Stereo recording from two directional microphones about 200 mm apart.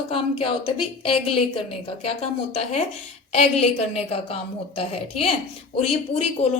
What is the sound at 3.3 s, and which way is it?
A woman's voice, 30° left (ahead or behind).